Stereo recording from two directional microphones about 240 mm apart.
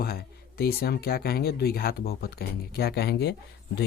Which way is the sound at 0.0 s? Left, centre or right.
Left.